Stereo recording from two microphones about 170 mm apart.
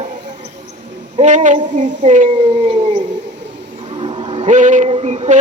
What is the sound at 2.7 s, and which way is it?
Howl, 35° right (ahead or behind).